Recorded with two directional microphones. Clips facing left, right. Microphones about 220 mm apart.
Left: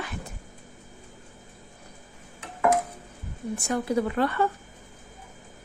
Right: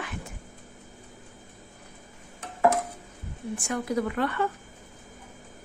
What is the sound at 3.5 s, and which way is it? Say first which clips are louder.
Speech: left 2 dB; 30° left (ahead or behind).